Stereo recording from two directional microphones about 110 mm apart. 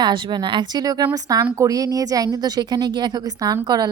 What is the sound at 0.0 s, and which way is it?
A woman's voice, 45° right (ahead or behind).